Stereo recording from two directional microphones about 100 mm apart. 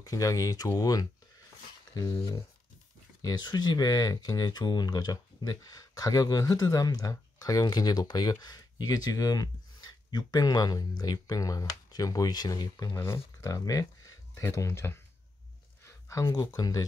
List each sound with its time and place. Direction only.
0.0 s speech: 35° left (ahead or behind)
3.2 s speech: 45° left (ahead or behind)